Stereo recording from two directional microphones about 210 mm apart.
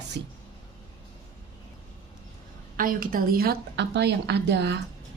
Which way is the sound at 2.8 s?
40° right (ahead or behind).